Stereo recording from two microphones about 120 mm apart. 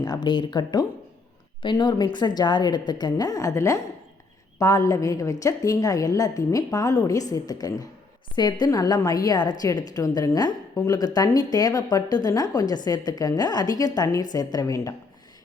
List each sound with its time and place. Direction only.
0.0 s a woman's voice: 35° left (ahead or behind)